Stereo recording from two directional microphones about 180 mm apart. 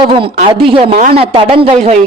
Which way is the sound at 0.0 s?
30° right (ahead or behind).